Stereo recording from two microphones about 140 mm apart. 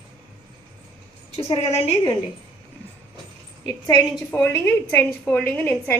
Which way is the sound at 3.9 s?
15° left (ahead or behind).